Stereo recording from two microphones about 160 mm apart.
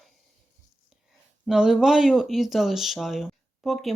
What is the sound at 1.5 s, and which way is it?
Speech, 5° right (ahead or behind).